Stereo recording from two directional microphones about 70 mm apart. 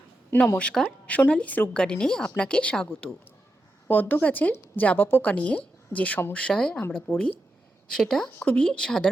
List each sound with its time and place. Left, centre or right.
0.4 s a woman's voice: left
3.8 s a woman's voice: left; by 6.8 s centre
7.1 s speech: left
7.9 s a woman's voice: centre